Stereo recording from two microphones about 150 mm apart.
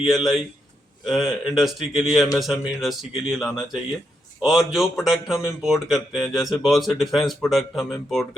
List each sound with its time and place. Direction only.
0.0 s speech: centre (ahead or behind)